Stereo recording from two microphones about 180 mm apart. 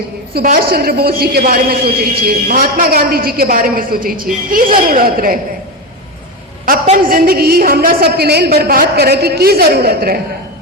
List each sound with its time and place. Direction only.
0.3 s a man's voice: 55° right (ahead or behind)
6.8 s a woman's voice: 45° right (ahead or behind)